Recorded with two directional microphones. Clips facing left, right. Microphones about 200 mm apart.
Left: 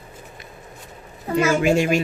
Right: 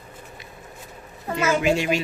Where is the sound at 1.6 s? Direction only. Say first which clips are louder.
Left 3 dB; 50° left (ahead or behind).